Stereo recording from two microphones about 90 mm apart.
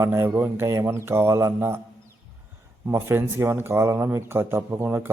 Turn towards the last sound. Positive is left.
turn(degrees=-25)  # may be behind; listen again after turning